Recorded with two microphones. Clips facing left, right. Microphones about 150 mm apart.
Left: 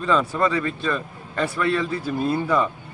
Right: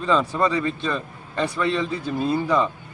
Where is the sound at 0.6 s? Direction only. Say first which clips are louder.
Right 1 dB; 30° right (ahead or behind).